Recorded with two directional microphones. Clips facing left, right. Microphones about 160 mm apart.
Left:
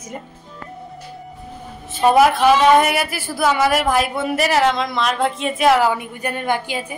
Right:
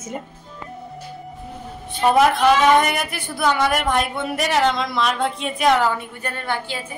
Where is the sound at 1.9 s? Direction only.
5° left (ahead or behind).